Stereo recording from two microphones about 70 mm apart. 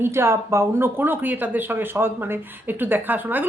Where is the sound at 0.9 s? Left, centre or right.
Right.